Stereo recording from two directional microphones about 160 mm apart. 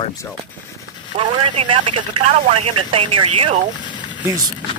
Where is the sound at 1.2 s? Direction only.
30° right (ahead or behind).